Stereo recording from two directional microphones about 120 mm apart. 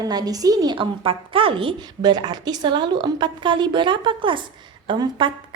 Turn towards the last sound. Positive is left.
turn(degrees=-40)  # may be behind; listen again after turning